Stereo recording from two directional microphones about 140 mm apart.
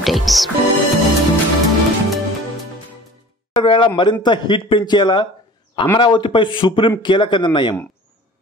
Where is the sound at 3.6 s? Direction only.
35° left (ahead or behind).